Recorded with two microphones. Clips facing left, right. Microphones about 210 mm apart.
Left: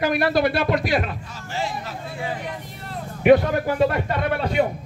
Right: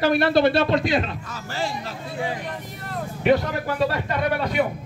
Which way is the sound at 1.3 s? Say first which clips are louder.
Even; 40° right (ahead or behind).